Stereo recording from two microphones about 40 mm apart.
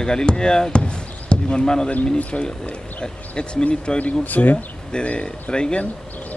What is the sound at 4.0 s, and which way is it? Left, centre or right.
Speech, left.